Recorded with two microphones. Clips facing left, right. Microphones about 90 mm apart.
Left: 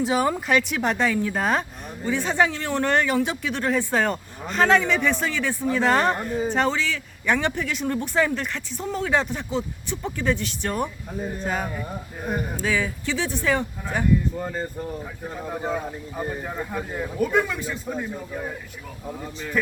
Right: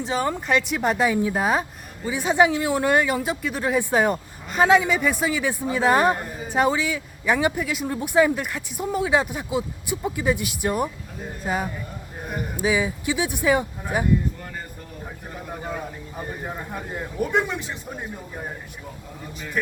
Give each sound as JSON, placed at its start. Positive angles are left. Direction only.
{"t": 0.0, "sound": "a woman's voice", "side_deg": 5}
{"t": 14.3, "sound": "speech", "side_deg": 20}
{"t": 16.4, "sound": "speech", "side_deg": -10}
{"t": 17.2, "sound": "speech", "side_deg": -20}